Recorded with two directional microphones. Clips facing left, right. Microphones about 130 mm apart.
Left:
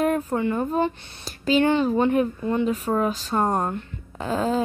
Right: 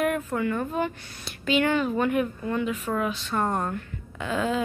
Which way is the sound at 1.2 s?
35° left (ahead or behind).